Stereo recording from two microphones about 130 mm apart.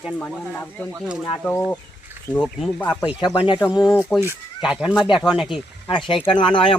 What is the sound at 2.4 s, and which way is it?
Speech, centre (ahead or behind).